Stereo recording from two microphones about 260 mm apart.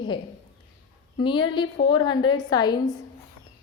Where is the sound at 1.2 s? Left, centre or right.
Centre.